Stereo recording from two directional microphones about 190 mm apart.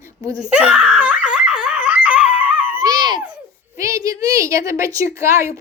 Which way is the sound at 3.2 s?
10° right (ahead or behind).